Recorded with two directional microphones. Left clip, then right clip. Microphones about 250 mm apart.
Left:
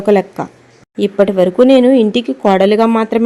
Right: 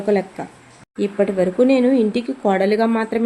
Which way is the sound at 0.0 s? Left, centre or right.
Left.